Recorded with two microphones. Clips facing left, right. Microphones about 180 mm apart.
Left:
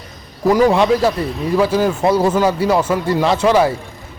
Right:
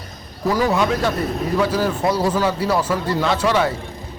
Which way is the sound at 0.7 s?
30° left (ahead or behind).